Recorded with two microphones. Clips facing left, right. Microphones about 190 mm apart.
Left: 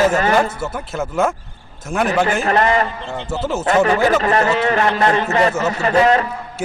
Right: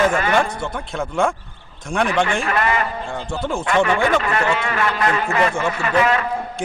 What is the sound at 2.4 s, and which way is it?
Speech, 35° left (ahead or behind).